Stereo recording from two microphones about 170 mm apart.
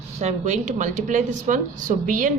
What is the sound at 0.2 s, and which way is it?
Speech, 45° right (ahead or behind).